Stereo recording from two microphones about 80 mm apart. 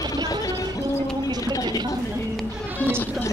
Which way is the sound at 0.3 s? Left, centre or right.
Left.